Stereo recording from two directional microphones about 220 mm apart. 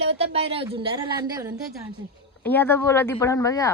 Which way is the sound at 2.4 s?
10° left (ahead or behind).